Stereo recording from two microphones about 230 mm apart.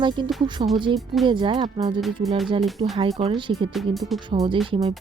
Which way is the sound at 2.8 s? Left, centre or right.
Right.